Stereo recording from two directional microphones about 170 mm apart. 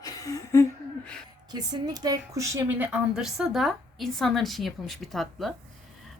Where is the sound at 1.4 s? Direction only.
25° right (ahead or behind); by 5.5 s centre (ahead or behind).